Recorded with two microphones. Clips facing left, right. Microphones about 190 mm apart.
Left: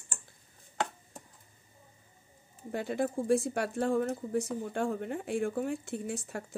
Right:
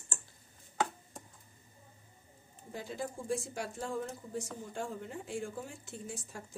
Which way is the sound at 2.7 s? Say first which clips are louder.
Left 8 dB; 65° left (ahead or behind).